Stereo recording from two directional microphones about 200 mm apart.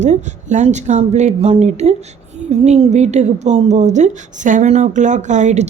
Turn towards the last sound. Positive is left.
turn(degrees=-35)  # may be behind; listen again after turning